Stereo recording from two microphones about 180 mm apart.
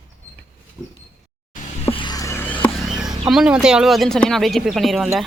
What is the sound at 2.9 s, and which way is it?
Speech, centre (ahead or behind).